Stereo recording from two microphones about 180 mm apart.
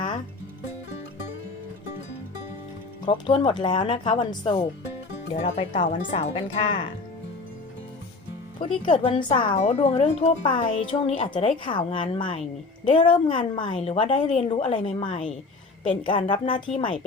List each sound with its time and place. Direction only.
3.1 s a woman's voice: 30° left (ahead or behind)
5.3 s speech: 40° left (ahead or behind)
8.5 s a woman's voice: 30° left (ahead or behind)